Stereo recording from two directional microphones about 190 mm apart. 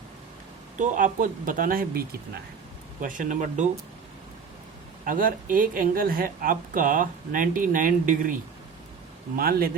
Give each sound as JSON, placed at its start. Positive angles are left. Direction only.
{"t": 0.8, "sound": "speech", "side_deg": -45}
{"t": 5.0, "sound": "speech", "side_deg": -45}
{"t": 9.4, "sound": "speech", "side_deg": -50}